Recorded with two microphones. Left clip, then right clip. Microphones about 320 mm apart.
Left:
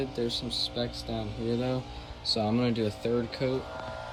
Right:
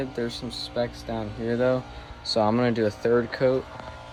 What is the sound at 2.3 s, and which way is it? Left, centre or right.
Speech, centre.